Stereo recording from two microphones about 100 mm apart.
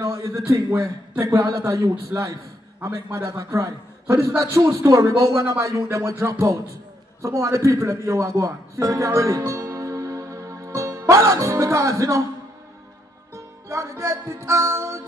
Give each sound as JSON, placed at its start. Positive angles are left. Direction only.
{"t": 0.0, "sound": "a sound", "side_deg": -30}
{"t": 0.5, "sound": "a man's voice", "side_deg": -30}
{"t": 13.3, "sound": "music", "side_deg": -30}